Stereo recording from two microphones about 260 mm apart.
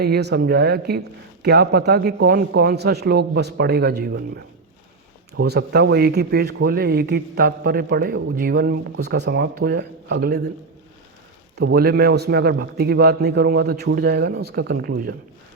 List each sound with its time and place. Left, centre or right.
0.0 s speech: right
11.5 s speech: right